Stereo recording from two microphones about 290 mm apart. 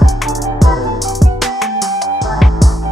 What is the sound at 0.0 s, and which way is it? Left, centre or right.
Music, centre.